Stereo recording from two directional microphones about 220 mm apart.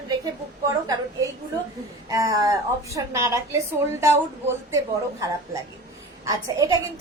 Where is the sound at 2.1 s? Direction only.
15° right (ahead or behind).